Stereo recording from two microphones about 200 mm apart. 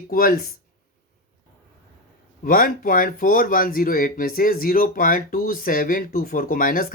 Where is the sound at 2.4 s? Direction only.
45° left (ahead or behind).